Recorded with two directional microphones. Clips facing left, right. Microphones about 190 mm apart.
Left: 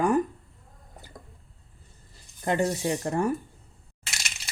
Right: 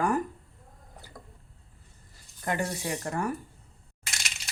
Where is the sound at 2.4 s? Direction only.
25° left (ahead or behind).